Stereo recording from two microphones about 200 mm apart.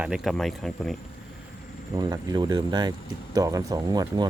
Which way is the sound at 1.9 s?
20° right (ahead or behind).